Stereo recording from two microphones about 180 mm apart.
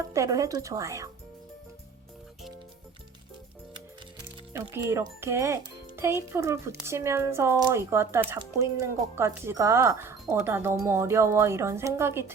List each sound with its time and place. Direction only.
0.1 s speech: 20° right (ahead or behind)
4.7 s speech: 15° right (ahead or behind)